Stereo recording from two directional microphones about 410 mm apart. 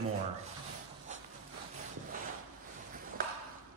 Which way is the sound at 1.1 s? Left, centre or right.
Centre.